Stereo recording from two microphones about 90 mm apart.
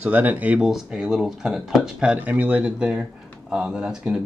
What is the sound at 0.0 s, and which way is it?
Speech, 20° right (ahead or behind).